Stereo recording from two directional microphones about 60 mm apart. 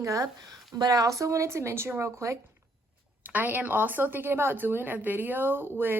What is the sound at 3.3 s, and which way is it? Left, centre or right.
Speech, right.